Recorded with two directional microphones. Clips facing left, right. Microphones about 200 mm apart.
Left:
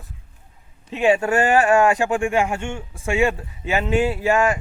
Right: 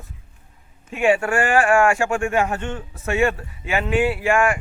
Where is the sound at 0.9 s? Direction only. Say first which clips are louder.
Left 1 dB; 20° left (ahead or behind).